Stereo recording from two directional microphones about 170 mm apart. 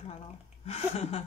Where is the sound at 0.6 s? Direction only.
35° left (ahead or behind).